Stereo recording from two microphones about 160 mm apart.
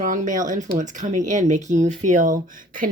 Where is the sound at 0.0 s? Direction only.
55° right (ahead or behind).